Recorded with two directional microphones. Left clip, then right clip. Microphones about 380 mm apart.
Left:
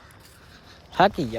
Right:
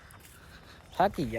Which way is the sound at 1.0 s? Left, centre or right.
Centre.